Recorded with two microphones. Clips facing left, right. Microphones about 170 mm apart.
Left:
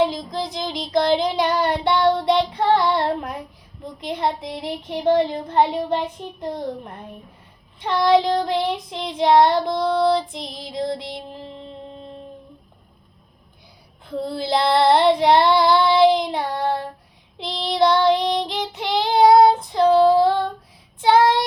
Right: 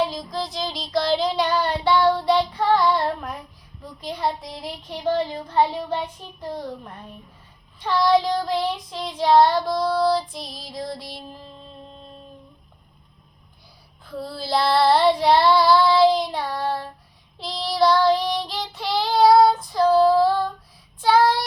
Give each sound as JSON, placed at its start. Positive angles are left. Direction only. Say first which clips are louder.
{"t": 0.0, "sound": "child singing", "louder": "left 4 dB", "side_deg": 20}
{"t": 6.4, "sound": "child singing", "louder": "left 3 dB", "side_deg": 20}
{"t": 14.0, "sound": "child singing", "louder": "left 6 dB", "side_deg": 20}